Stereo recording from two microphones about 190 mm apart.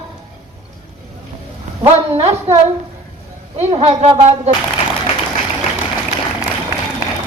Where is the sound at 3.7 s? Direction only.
35° right (ahead or behind).